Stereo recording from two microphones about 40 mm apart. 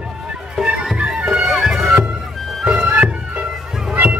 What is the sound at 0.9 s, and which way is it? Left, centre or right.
Music, right.